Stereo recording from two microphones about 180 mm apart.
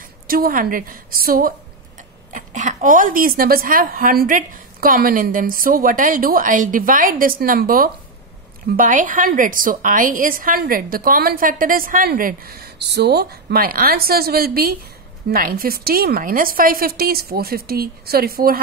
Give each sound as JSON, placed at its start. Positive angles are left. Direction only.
{"t": 0.0, "sound": "a woman's voice", "side_deg": -50}
{"t": 2.0, "sound": "a woman's voice", "side_deg": -45}